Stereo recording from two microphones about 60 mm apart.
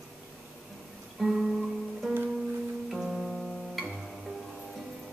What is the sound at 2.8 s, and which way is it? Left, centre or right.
Music, centre.